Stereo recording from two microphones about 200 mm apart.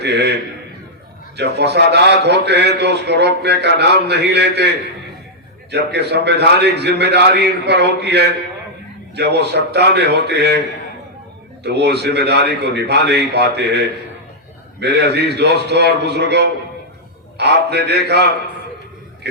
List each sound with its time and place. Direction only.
0.0 s a sound: 55° right (ahead or behind)
1.4 s a man's voice: 55° right (ahead or behind)
5.7 s a man's voice: 55° right (ahead or behind)
11.6 s a man's voice: 55° right (ahead or behind)